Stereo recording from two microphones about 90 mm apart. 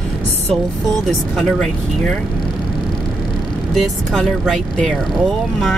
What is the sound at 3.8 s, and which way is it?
Speech, 5° left (ahead or behind).